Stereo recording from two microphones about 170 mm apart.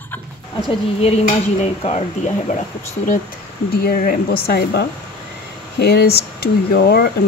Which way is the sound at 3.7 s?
60° left (ahead or behind).